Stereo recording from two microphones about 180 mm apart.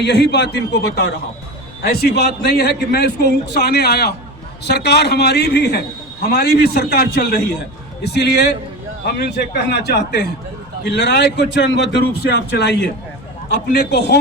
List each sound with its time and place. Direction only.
0.0 s a man's voice: 70° left (ahead or behind)